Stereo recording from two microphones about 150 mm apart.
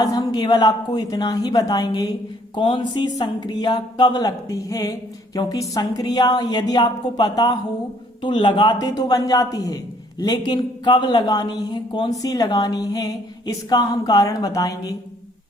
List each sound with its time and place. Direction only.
0.0 s speech: 25° left (ahead or behind)